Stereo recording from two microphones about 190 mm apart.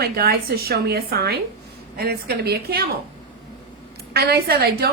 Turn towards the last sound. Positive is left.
turn(degrees=-55)  # may be behind; listen again after turning